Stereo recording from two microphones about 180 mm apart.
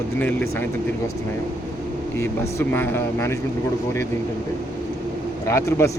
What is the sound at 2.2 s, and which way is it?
Speech, 10° left (ahead or behind).